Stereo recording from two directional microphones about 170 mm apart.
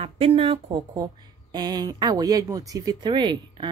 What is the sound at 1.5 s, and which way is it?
Speech, 25° right (ahead or behind).